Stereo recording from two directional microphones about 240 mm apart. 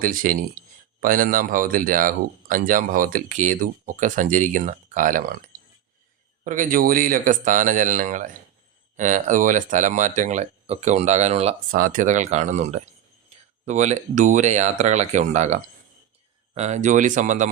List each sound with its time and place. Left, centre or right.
0.0 s speech: right
6.4 s speech: right